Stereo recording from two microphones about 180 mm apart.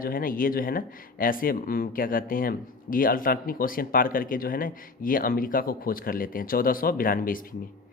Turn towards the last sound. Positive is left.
turn(degrees=50)  # may be behind; listen again after turning